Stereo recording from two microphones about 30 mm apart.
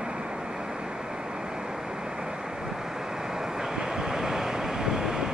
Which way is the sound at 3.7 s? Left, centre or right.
Right.